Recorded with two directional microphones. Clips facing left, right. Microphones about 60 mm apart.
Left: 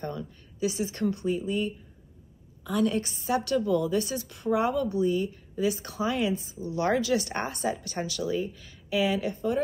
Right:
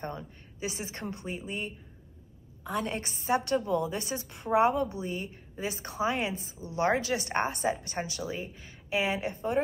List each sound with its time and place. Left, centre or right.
0.0 s a woman's voice: right